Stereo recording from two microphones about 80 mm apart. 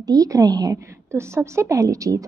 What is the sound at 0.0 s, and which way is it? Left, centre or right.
Speech, right.